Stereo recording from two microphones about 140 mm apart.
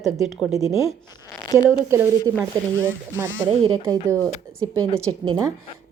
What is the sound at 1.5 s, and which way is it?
Speech, 30° left (ahead or behind).